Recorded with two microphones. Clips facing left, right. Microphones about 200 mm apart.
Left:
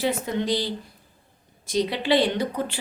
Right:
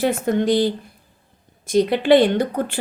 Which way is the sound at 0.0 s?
50° right (ahead or behind).